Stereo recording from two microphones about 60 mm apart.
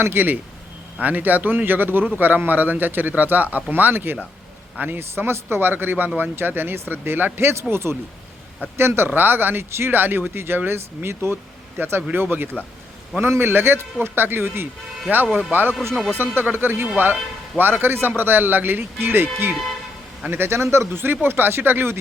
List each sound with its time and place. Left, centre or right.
0.0 s speech: right